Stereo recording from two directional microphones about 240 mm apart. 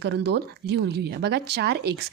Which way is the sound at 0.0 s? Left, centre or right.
Right.